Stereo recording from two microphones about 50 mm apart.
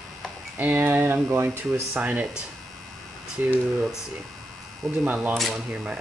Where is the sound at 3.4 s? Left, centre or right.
Right.